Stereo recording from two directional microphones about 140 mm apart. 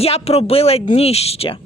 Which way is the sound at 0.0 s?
45° left (ahead or behind).